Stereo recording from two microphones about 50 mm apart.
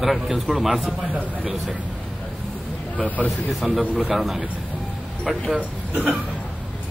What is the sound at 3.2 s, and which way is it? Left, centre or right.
A man's voice, centre.